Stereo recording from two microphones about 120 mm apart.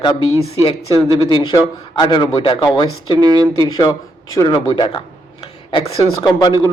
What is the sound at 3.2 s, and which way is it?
Speech, 35° right (ahead or behind).